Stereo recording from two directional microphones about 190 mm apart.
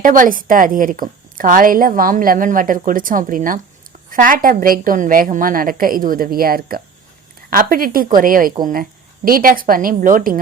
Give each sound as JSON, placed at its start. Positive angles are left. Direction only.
{"t": 0.0, "sound": "a woman's voice", "side_deg": -45}